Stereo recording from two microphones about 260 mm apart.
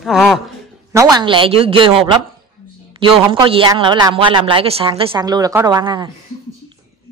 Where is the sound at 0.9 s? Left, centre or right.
Centre.